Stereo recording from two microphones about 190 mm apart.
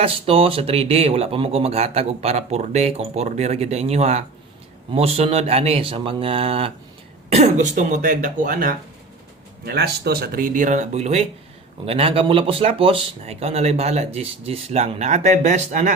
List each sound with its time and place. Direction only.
0.0 s speech: 30° right (ahead or behind); by 8.7 s 45° right (ahead or behind)
9.6 s speech: 55° right (ahead or behind); by 15.9 s 40° right (ahead or behind)